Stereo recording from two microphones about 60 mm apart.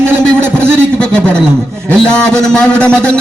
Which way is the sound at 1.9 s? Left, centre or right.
Centre.